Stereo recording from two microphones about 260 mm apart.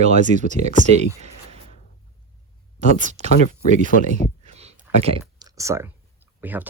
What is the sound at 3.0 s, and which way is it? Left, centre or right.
Speech, right.